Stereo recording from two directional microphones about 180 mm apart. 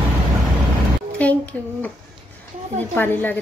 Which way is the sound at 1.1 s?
10° left (ahead or behind).